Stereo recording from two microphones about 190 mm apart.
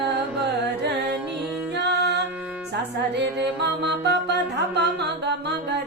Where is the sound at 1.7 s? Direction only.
60° right (ahead or behind).